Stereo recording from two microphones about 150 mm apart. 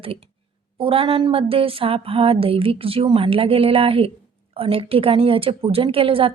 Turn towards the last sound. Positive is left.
turn(degrees=-35)  # may be behind; listen again after turning